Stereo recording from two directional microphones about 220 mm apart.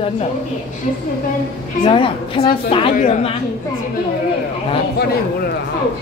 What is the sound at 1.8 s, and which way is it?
Speech, 25° left (ahead or behind).